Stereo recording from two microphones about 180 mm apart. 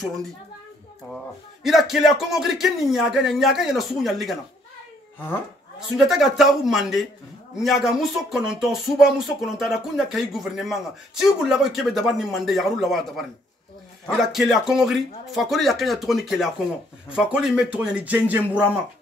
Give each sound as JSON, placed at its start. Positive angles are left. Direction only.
{"t": 1.1, "sound": "speech", "side_deg": 0}
{"t": 5.9, "sound": "speech", "side_deg": 0}